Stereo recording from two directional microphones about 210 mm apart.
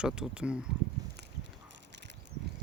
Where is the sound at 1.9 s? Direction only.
55° right (ahead or behind).